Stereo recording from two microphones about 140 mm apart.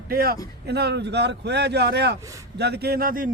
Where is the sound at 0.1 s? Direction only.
90° right.